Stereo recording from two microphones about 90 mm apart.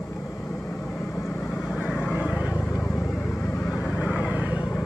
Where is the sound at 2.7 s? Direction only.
35° left (ahead or behind).